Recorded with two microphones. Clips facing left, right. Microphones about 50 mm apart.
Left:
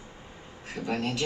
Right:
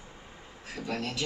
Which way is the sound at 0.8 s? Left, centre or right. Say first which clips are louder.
Left 4 dB; centre.